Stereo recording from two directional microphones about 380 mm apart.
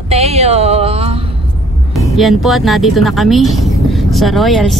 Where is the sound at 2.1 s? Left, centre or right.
Centre.